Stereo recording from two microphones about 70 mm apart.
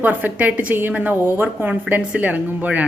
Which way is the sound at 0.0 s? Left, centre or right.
Right.